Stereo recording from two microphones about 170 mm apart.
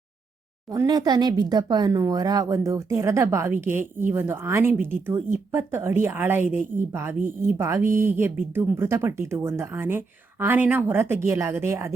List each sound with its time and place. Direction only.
0.7 s speech: 20° right (ahead or behind)